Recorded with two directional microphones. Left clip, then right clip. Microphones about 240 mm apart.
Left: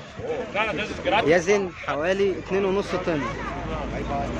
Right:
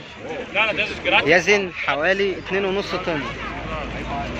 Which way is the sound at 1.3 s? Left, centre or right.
Centre.